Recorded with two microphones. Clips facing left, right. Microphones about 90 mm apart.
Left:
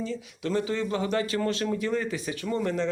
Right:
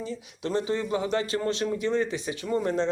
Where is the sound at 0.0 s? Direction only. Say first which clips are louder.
Left 1 dB; 20° right (ahead or behind).